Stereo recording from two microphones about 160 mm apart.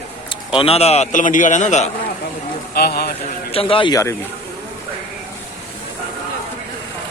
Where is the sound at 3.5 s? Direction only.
35° left (ahead or behind).